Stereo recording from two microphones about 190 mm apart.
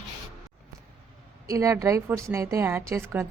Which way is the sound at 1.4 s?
15° right (ahead or behind).